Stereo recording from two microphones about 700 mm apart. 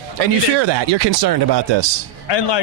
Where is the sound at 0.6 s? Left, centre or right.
Right.